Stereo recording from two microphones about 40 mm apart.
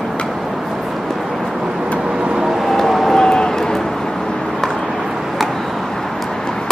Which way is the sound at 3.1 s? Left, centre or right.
Centre.